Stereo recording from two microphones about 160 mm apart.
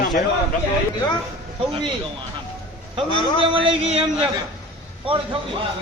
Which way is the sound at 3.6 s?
35° right (ahead or behind).